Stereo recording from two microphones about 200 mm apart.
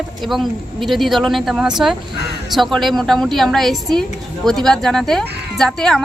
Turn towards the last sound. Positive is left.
turn(degrees=5)  # may be behind; listen again after turning